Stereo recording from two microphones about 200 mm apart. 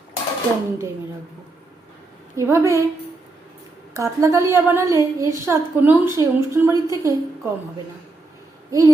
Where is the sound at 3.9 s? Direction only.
15° right (ahead or behind).